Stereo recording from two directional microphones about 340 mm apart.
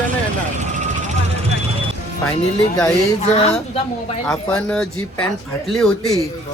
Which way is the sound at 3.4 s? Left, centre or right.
Centre.